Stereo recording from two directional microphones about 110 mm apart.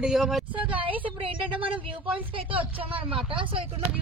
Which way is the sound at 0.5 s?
15° right (ahead or behind).